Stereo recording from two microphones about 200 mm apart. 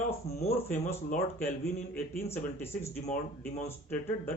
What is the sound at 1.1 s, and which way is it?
Speech, 5° left (ahead or behind).